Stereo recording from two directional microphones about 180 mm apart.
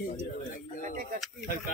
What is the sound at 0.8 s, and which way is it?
Speech, 50° right (ahead or behind).